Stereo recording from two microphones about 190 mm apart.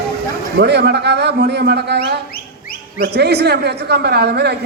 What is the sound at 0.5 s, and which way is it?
A man's voice, 60° right (ahead or behind).